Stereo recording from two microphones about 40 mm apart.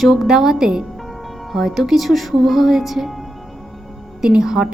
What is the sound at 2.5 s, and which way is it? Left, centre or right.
Speech, centre.